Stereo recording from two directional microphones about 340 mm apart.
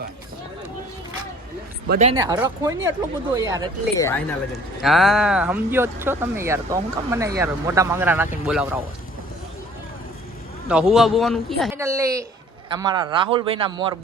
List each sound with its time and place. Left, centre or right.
1.9 s speech: centre
3.9 s speech: centre
10.7 s speech: centre